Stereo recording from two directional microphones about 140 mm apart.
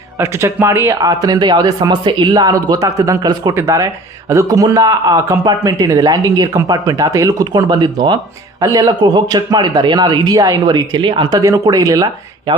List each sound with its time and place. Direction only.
0.2 s speech: 20° right (ahead or behind)